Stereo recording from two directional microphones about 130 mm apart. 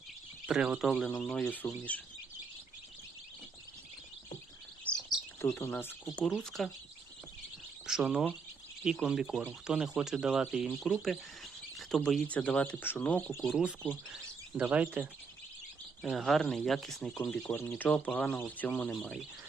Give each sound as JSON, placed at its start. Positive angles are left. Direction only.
{"t": 0.4, "sound": "speech", "side_deg": -5}
{"t": 1.0, "sound": "speech", "side_deg": 10}
{"t": 5.0, "sound": "bird", "side_deg": 30}
{"t": 5.5, "sound": "speech", "side_deg": 20}
{"t": 6.1, "sound": "speech", "side_deg": 5}
{"t": 7.9, "sound": "speech", "side_deg": -5}
{"t": 13.4, "sound": "speech", "side_deg": -5}
{"t": 16.0, "sound": "speech", "side_deg": 0}
{"t": 18.9, "sound": "speech", "side_deg": 0}